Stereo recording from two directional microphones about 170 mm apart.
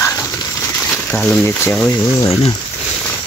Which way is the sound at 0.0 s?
20° left (ahead or behind).